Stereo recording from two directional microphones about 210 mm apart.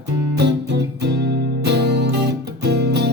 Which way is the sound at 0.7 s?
55° right (ahead or behind).